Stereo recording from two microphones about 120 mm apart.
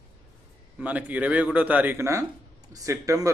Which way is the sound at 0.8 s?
10° right (ahead or behind).